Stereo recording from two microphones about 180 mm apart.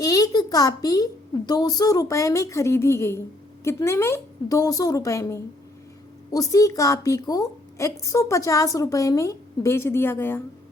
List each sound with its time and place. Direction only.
0.0 s a child's voice: 20° left (ahead or behind)